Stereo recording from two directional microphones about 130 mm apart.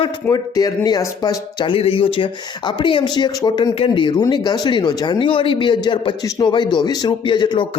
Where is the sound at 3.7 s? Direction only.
40° left (ahead or behind).